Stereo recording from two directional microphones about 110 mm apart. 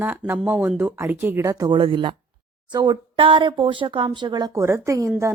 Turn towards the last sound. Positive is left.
turn(degrees=-30)  # may be behind; listen again after turning